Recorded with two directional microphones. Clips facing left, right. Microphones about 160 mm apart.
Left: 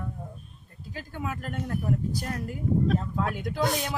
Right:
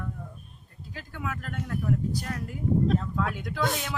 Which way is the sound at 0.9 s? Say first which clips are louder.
Left 2 dB; 35° left (ahead or behind).